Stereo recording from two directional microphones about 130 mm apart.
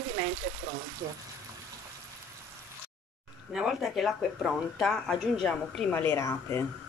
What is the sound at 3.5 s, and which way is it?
Speech, 5° right (ahead or behind).